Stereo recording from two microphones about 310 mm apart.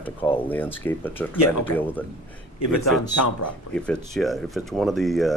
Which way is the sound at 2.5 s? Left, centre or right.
Left.